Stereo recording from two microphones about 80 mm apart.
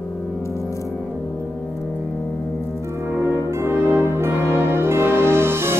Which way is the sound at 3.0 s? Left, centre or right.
Right.